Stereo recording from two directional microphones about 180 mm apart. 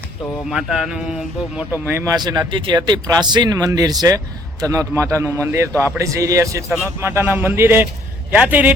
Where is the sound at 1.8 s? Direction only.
20° right (ahead or behind).